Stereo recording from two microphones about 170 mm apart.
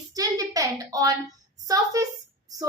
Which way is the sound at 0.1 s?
20° right (ahead or behind).